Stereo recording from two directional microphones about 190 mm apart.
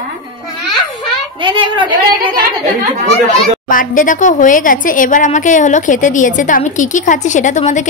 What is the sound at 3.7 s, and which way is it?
A woman's voice, 45° left (ahead or behind).